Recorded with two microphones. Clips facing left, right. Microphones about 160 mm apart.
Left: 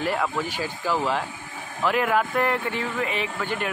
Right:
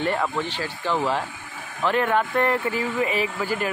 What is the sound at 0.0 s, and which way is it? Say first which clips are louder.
Speech: right 1 dB; 5° left (ahead or behind).